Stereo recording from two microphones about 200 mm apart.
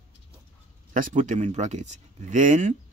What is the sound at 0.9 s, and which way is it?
Speech, 40° right (ahead or behind).